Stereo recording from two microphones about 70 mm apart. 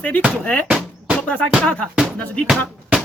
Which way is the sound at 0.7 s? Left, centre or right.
Centre.